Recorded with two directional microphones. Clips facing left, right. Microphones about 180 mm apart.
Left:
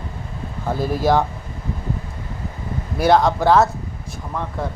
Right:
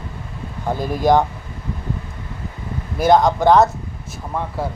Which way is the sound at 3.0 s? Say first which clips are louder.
Right 2 dB; centre (ahead or behind).